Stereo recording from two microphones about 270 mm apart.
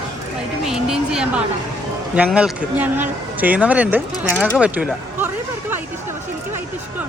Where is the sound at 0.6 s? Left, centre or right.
Centre.